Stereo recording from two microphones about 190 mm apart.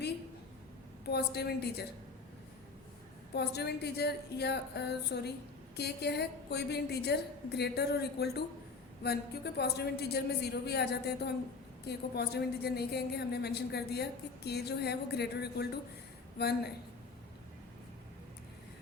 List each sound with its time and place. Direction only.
1.1 s a woman's voice: 60° left (ahead or behind)
3.3 s a woman's voice: 60° left (ahead or behind)